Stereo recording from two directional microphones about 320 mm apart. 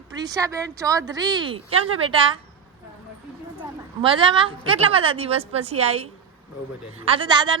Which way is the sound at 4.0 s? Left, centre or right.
Centre.